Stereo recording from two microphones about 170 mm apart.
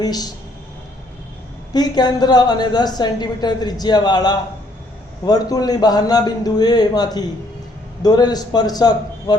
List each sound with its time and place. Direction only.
0.0 s a woman's voice: 25° left (ahead or behind)
1.7 s a woman's voice: 25° left (ahead or behind)